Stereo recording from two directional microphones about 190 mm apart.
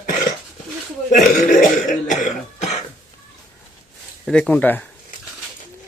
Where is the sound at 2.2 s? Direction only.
40° left (ahead or behind).